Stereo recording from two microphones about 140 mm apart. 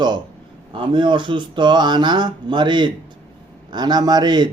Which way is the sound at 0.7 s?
35° right (ahead or behind).